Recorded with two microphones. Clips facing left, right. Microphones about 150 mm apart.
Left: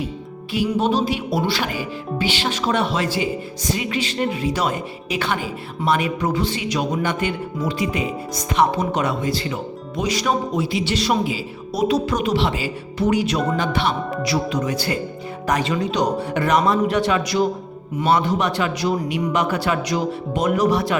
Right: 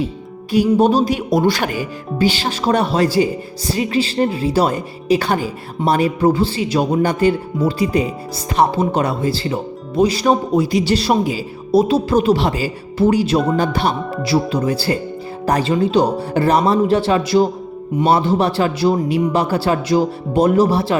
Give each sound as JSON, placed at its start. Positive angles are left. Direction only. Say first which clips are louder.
{"t": 0.5, "sound": "speech", "louder": "right 6 dB", "side_deg": -40}
{"t": 11.8, "sound": "speech", "louder": "right 4 dB", "side_deg": -30}